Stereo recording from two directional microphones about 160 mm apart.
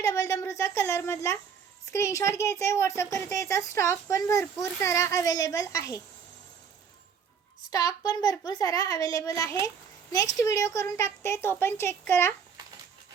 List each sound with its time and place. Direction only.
0.0 s a woman's voice: 20° left (ahead or behind)
7.7 s speech: 20° left (ahead or behind)
9.6 s a sound: 20° left (ahead or behind)
10.4 s a woman's voice: 20° left (ahead or behind)